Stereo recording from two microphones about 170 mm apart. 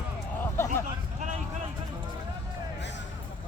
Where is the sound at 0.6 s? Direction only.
15° left (ahead or behind).